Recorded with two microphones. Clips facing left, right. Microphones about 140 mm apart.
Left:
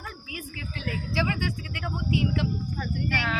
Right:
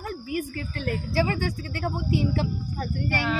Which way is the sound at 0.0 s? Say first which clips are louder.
Right 10 dB; 45° right (ahead or behind).